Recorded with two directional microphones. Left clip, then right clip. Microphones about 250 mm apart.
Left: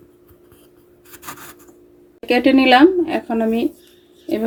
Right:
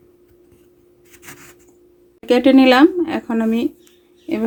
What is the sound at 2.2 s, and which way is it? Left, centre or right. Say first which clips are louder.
Speech: right 2 dB; right.